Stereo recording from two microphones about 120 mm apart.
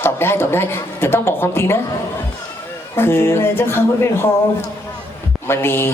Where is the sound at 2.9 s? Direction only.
20° left (ahead or behind).